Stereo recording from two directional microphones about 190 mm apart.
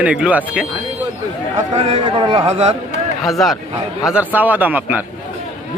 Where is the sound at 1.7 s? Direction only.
30° right (ahead or behind).